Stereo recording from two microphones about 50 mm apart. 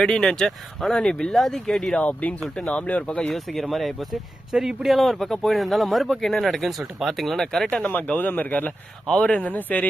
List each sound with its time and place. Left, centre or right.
0.0 s speech: centre
0.9 s speech: centre
2.0 s speech: left
3.3 s speech: centre
4.5 s speech: centre
7.7 s speech: left
7.9 s speech: left